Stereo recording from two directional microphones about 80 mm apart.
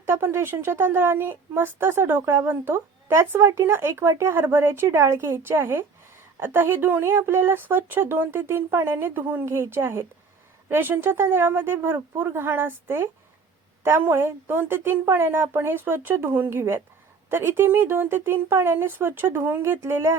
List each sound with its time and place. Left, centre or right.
0.0 s a woman's voice: right